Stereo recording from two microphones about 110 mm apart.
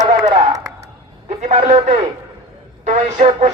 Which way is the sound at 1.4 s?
90° right.